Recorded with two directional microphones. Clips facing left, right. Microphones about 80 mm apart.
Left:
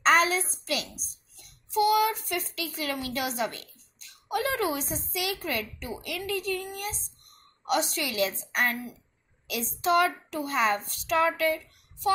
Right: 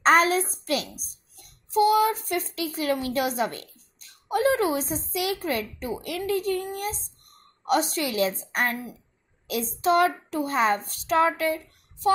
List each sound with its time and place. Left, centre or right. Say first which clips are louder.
0.0 s a child's voice: right 3 dB; right